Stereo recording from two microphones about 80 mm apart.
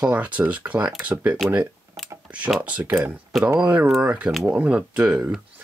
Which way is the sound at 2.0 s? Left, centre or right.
Centre.